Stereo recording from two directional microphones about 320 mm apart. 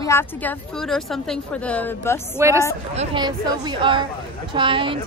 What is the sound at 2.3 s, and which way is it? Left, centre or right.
Speech, centre.